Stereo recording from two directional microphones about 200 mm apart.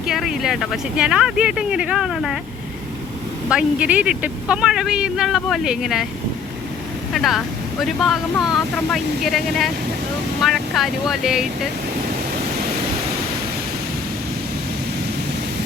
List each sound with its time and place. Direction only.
0.1 s speech: centre (ahead or behind)
3.5 s speech: 5° right (ahead or behind)
7.1 s speech: centre (ahead or behind)